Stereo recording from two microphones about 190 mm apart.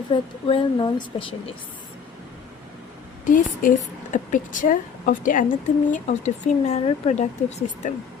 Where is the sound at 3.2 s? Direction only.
45° left (ahead or behind).